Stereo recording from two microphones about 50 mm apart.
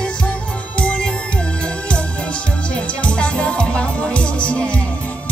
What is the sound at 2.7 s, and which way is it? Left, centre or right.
Music, left.